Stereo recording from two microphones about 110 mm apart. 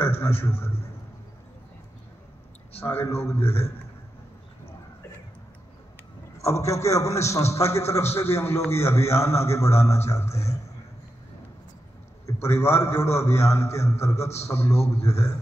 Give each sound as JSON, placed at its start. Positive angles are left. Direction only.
{"t": 0.0, "sound": "a sound", "side_deg": 20}
{"t": 2.8, "sound": "a man's voice", "side_deg": 20}
{"t": 6.4, "sound": "a man's voice", "side_deg": 25}
{"t": 12.3, "sound": "a man's voice", "side_deg": 25}